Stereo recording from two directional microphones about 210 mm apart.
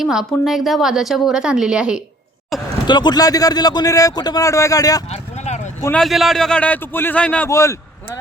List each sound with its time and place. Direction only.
0.0 s a woman's voice: centre (ahead or behind)
2.8 s a man's voice: 20° left (ahead or behind)
5.1 s a sound: 30° left (ahead or behind)
5.8 s a man's voice: 5° left (ahead or behind)